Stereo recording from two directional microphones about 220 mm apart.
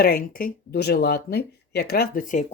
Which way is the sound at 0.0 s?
45° left (ahead or behind).